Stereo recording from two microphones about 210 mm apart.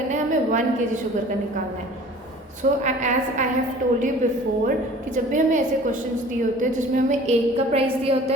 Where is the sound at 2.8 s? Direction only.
35° right (ahead or behind).